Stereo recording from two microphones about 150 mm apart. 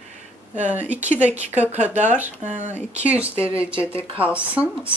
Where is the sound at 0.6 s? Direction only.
10° right (ahead or behind).